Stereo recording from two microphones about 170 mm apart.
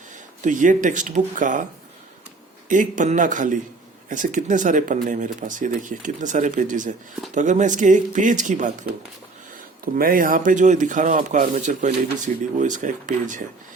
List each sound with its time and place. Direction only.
0.4 s speech: 50° right (ahead or behind)
2.6 s speech: 50° right (ahead or behind)
9.8 s speech: 60° right (ahead or behind)